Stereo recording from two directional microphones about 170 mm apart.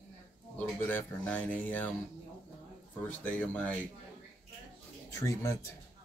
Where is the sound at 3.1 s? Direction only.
10° left (ahead or behind).